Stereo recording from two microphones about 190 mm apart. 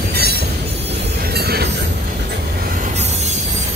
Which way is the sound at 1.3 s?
55° right (ahead or behind).